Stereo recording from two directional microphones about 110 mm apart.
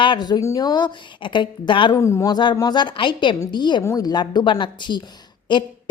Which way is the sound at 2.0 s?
25° left (ahead or behind).